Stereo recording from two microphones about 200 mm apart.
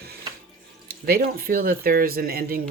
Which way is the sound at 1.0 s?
50° right (ahead or behind).